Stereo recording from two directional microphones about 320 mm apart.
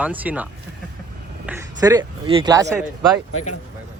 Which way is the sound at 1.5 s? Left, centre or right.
Centre.